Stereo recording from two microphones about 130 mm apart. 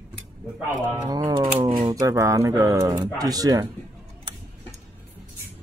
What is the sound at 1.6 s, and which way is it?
Speech, 40° right (ahead or behind).